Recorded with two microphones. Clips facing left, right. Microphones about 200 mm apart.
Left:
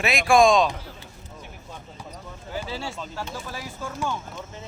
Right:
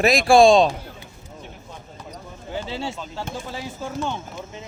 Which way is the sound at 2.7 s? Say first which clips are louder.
Right 3 dB; 25° right (ahead or behind).